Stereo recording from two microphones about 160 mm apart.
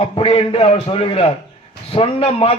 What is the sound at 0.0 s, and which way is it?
A man's voice, 35° left (ahead or behind).